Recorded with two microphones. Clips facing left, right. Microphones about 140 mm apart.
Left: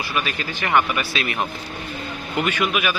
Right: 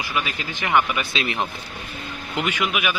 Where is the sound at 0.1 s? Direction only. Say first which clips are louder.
Left 1 dB; 15° right (ahead or behind).